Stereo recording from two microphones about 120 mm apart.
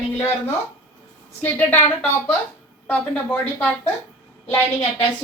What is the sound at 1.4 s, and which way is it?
Speech, 15° left (ahead or behind).